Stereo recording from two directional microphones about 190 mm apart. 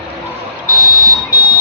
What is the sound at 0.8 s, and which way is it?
Vehicle, 50° left (ahead or behind).